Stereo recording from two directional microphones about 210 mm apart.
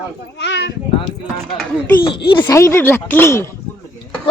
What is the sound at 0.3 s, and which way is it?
Speech, 55° left (ahead or behind).